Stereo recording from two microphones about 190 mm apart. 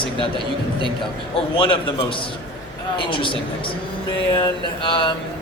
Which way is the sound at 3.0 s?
25° left (ahead or behind).